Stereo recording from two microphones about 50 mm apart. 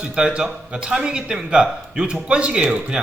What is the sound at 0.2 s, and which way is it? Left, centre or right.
Speech, centre.